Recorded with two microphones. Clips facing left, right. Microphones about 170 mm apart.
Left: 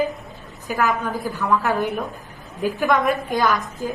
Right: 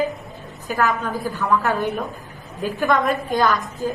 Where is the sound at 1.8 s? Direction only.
Centre (ahead or behind).